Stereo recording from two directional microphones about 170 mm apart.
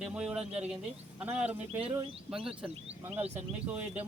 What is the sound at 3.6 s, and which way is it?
Speech, 10° right (ahead or behind).